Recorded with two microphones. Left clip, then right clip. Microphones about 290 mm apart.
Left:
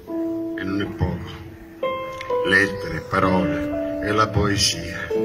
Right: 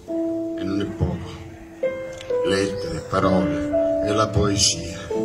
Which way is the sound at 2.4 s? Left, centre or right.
Centre.